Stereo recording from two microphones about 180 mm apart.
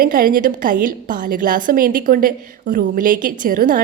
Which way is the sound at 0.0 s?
50° right (ahead or behind).